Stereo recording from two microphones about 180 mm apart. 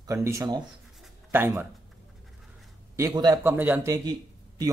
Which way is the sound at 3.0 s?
20° right (ahead or behind).